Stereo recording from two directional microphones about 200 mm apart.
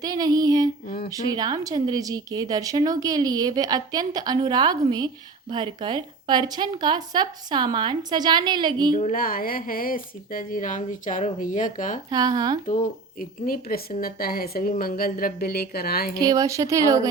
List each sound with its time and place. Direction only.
0.0 s speech: 20° right (ahead or behind)
0.9 s a woman's voice: 50° left (ahead or behind)
1.1 s speech: 20° right (ahead or behind)
9.0 s a woman's voice: 40° left (ahead or behind)
12.1 s speech: 20° right (ahead or behind)
12.6 s a woman's voice: 40° left (ahead or behind)
16.1 s speech: 15° right (ahead or behind)